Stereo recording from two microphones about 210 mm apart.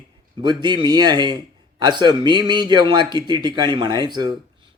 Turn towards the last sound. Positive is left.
turn(degrees=-20)  # may be behind; listen again after turning